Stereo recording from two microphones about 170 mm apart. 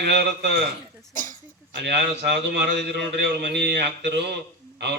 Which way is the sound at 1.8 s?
75° right (ahead or behind).